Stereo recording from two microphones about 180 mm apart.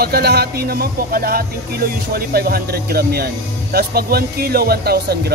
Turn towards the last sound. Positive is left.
turn(degrees=-60)  # may be behind; listen again after turning